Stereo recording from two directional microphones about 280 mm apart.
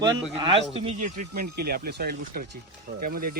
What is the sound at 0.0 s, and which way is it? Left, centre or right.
Speech, centre.